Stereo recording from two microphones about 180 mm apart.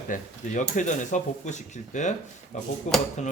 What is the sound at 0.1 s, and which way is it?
Speech, 45° left (ahead or behind).